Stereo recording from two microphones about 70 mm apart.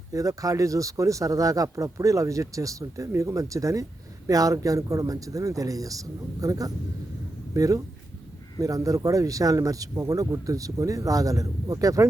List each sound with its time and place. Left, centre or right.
0.1 s speech: right